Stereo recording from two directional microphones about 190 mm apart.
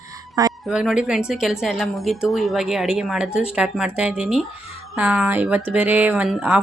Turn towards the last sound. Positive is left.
turn(degrees=-5)  # may be behind; listen again after turning